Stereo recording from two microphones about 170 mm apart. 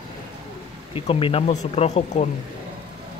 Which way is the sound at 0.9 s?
30° left (ahead or behind).